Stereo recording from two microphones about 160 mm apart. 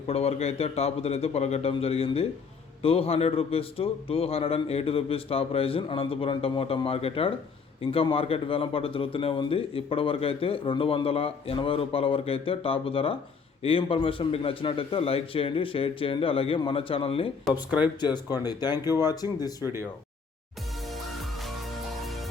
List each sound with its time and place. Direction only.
0.1 s a man's voice: 40° left (ahead or behind)
17.7 s speech: 10° right (ahead or behind)
18.0 s speech: 25° left (ahead or behind)
21.1 s music: centre (ahead or behind)